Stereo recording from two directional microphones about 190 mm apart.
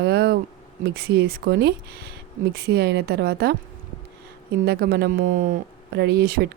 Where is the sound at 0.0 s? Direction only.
55° right (ahead or behind).